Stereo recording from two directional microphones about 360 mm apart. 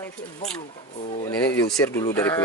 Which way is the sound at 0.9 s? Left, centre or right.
Centre.